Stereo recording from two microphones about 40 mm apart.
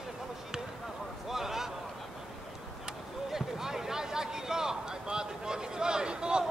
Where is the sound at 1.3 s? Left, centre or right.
Centre.